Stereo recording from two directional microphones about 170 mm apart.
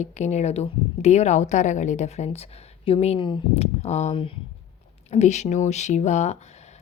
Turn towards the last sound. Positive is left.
turn(degrees=40)  # may be behind; listen again after turning